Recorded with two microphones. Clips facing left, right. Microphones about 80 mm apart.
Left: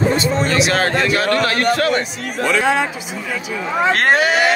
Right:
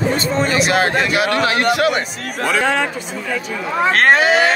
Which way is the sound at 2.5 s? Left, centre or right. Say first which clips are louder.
Even; centre.